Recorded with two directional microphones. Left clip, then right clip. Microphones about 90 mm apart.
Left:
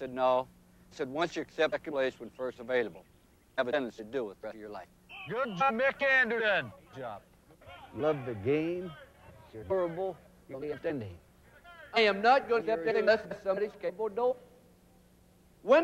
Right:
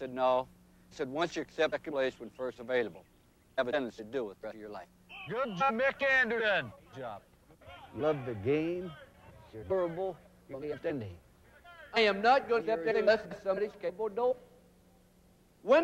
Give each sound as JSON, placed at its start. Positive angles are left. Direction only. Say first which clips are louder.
{"t": 0.0, "sound": "a man's voice", "louder": "left 1 dB", "side_deg": -35}
{"t": 15.6, "sound": "a man's voice", "louder": "left 1 dB", "side_deg": -35}